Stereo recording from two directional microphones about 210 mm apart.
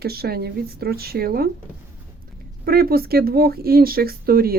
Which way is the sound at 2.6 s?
45° right (ahead or behind).